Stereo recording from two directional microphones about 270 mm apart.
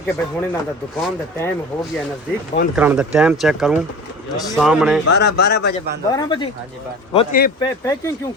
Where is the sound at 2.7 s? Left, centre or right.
Centre.